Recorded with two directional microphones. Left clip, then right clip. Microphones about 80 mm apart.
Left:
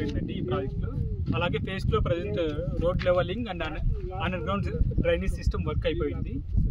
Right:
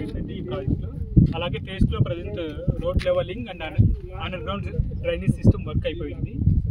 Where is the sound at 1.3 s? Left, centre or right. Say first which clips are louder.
Even; left.